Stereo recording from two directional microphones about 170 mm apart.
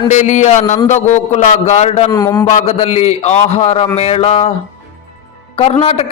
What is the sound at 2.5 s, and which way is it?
A man's voice, 40° left (ahead or behind).